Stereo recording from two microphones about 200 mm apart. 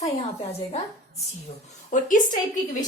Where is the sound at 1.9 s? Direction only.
40° left (ahead or behind).